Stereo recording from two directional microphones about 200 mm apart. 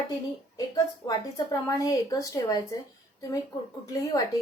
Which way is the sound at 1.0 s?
20° left (ahead or behind).